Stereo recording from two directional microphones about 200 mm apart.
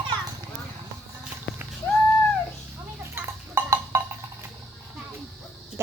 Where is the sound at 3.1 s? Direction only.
10° right (ahead or behind).